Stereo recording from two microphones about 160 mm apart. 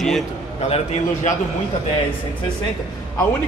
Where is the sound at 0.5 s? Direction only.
40° left (ahead or behind).